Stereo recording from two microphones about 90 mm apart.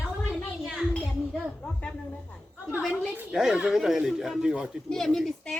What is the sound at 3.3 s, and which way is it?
Speech, 5° right (ahead or behind).